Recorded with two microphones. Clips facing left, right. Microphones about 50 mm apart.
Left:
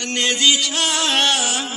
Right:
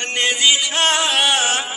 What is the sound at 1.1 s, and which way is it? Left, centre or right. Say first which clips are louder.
Music: right 1 dB; centre.